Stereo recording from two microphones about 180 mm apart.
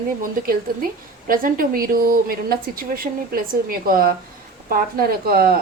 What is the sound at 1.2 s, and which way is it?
A woman's voice, 50° right (ahead or behind).